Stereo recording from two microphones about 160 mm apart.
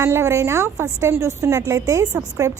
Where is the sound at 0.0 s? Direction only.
15° right (ahead or behind).